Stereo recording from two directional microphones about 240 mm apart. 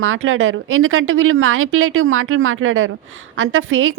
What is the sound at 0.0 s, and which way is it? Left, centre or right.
Speech, right.